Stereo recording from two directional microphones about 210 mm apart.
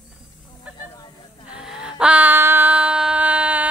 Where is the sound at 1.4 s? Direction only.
5° right (ahead or behind).